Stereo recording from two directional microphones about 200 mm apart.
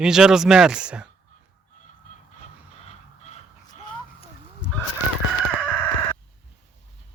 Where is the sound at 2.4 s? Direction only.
35° left (ahead or behind).